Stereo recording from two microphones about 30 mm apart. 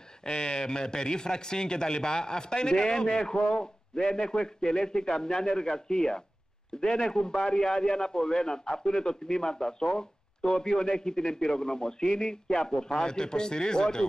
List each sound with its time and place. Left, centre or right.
0.2 s a man's voice: left